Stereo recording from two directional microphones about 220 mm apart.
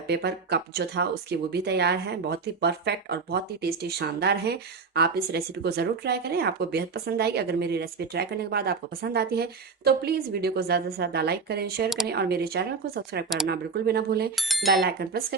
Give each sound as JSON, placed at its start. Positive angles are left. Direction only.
{"t": 0.1, "sound": "speech", "side_deg": -50}
{"t": 14.3, "sound": "speech", "side_deg": 0}
{"t": 14.8, "sound": "speech", "side_deg": -45}